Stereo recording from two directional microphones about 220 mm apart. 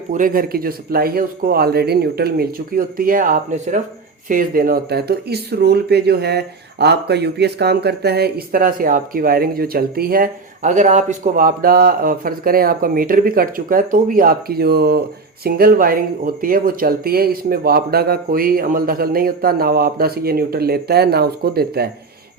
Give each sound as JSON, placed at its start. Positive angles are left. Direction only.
{"t": 0.1, "sound": "speech", "side_deg": -40}